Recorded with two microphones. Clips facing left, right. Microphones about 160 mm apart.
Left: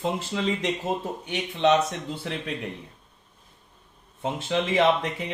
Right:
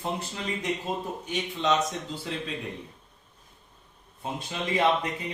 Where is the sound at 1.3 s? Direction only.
65° left (ahead or behind).